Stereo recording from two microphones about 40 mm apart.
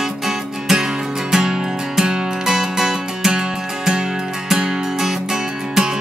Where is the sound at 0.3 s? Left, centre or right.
Centre.